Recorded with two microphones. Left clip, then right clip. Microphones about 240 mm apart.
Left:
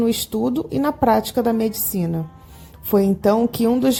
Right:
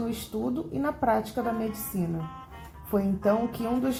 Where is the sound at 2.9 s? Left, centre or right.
Left.